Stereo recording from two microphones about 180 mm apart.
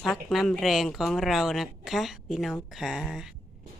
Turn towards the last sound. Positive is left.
turn(degrees=0)  # may be behind; listen again after turning